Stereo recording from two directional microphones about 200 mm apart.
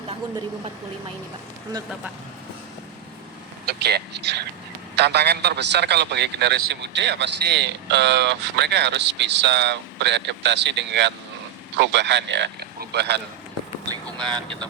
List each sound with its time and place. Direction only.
3.7 s a man's voice: 55° right (ahead or behind)
14.3 s speech: 25° right (ahead or behind)